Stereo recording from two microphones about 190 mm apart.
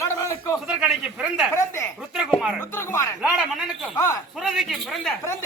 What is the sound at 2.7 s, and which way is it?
Speech, 15° left (ahead or behind).